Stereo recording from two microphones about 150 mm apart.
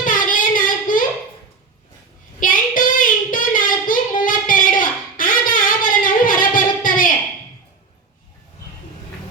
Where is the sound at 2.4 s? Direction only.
65° left (ahead or behind).